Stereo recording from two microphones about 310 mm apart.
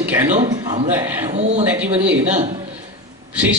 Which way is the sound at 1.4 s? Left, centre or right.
Right.